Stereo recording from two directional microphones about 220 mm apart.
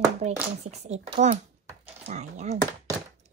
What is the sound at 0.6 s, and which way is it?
Speech, 30° right (ahead or behind).